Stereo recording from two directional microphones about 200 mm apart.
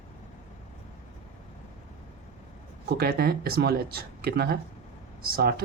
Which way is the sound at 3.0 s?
50° right (ahead or behind).